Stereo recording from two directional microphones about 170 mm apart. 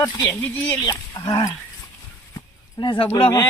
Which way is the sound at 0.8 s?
20° left (ahead or behind).